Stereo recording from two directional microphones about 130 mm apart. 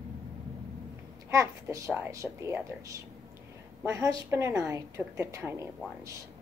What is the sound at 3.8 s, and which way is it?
A woman's voice, 20° right (ahead or behind).